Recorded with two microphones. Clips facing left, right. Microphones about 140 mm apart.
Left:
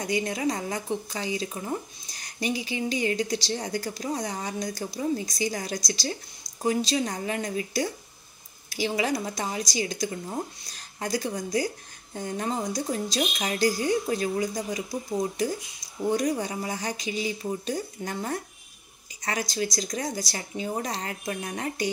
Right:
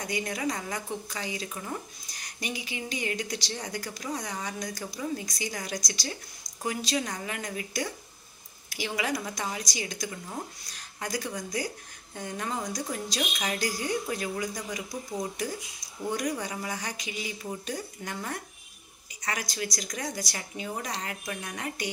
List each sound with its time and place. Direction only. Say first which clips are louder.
0.0 s a woman's voice: left 4 dB; 25° left (ahead or behind)